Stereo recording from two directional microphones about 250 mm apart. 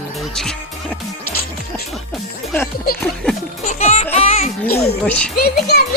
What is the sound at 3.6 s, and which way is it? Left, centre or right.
Speech, left.